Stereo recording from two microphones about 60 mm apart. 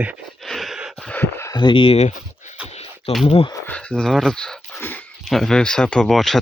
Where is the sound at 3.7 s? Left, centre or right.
Centre.